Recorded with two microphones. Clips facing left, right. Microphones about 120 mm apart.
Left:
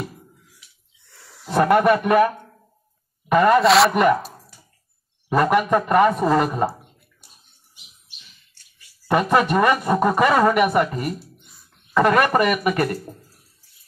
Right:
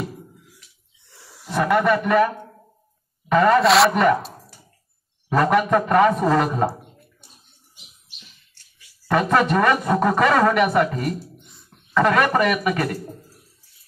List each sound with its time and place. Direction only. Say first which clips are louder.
1.0 s wild animals: right 1 dB; 20° right (ahead or behind)
1.5 s a man's voice: left 3 dB; 30° left (ahead or behind)
3.3 s speech: left 1 dB; 5° left (ahead or behind)
9.2 s speech: even; 5° left (ahead or behind)